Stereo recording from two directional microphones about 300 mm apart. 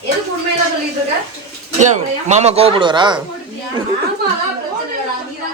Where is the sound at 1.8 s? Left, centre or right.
Right.